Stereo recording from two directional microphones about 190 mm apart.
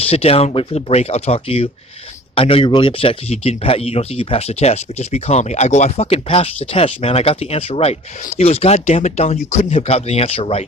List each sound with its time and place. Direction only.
0.0 s speech: 30° left (ahead or behind)